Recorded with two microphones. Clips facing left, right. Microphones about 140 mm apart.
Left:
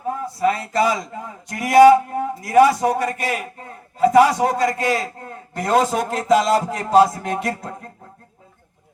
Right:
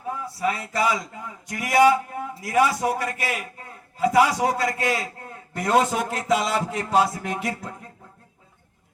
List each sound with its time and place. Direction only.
0.1 s a man's voice: 35° left (ahead or behind)